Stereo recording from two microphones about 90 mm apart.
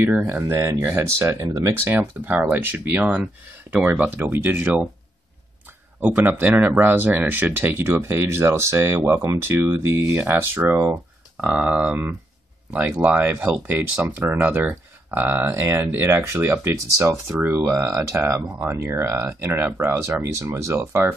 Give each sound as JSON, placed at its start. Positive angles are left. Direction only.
{"t": 0.3, "sound": "speech", "side_deg": -30}
{"t": 1.9, "sound": "speech", "side_deg": -20}
{"t": 5.9, "sound": "speech", "side_deg": -20}